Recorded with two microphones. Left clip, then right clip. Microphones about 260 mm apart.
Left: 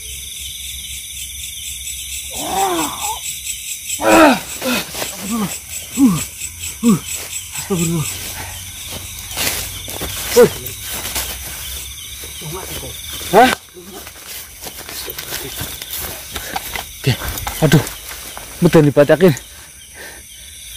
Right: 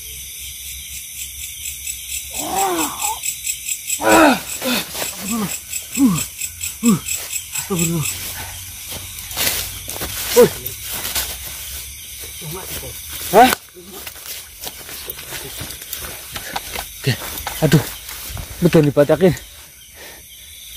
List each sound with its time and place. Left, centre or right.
2.3 s snoring: centre
4.0 s a sound: centre
8.9 s walk: right
13.2 s snake: right
17.0 s snake: centre
18.6 s speech: centre